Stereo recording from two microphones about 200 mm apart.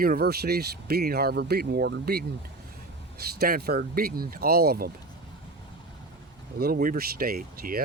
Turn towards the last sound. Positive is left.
turn(degrees=-50)  # may be behind; listen again after turning